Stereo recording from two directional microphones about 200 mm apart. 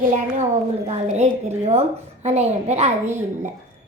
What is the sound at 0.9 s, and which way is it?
A woman's voice, 35° right (ahead or behind).